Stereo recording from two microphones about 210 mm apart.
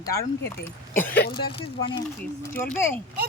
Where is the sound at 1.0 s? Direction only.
10° left (ahead or behind).